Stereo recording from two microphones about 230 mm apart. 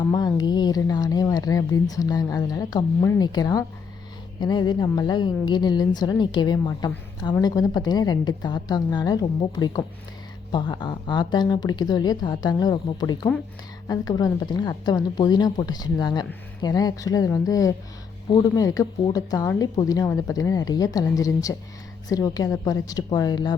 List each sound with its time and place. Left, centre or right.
0.1 s a woman's voice: centre